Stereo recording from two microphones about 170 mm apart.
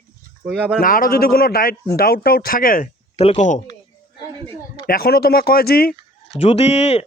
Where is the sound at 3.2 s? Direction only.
40° left (ahead or behind).